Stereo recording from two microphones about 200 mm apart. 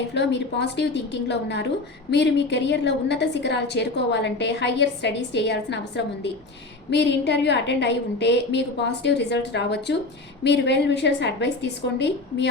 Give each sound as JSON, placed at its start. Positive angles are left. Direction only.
{"t": 0.1, "sound": "a woman's voice", "side_deg": 60}
{"t": 6.9, "sound": "a woman's voice", "side_deg": 60}